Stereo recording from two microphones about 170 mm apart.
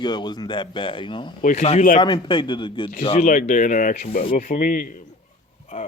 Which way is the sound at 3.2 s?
50° left (ahead or behind).